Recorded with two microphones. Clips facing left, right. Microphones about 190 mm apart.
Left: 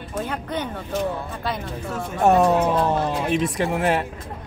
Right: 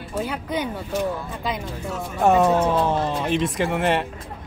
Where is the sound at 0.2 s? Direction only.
10° right (ahead or behind).